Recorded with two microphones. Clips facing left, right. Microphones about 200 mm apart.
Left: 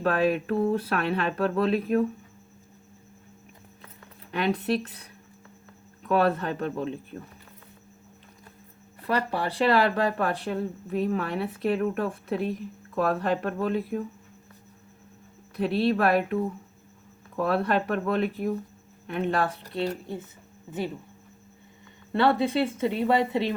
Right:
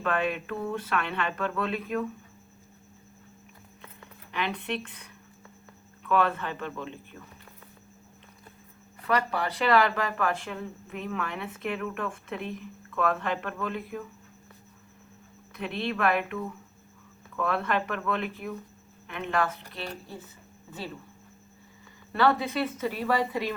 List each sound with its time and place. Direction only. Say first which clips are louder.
0.0 s speech: left 5 dB; 35° left (ahead or behind)
4.3 s speech: left 6 dB; 40° left (ahead or behind)
9.0 s speech: left 1 dB; 30° left (ahead or behind)
15.5 s speech: left 8 dB; 35° left (ahead or behind)
22.1 s speech: left 3 dB; 25° left (ahead or behind)